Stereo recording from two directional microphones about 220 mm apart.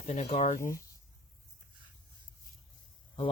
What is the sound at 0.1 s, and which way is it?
Speech, 30° left (ahead or behind).